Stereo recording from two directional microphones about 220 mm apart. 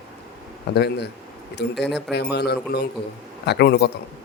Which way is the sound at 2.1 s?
50° left (ahead or behind).